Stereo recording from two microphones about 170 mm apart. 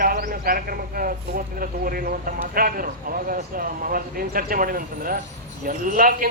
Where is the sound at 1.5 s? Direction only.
55° right (ahead or behind).